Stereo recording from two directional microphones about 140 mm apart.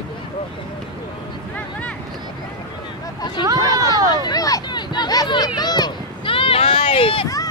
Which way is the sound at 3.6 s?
25° left (ahead or behind).